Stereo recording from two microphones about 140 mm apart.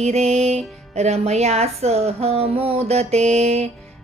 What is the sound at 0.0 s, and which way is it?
Speech, 50° right (ahead or behind).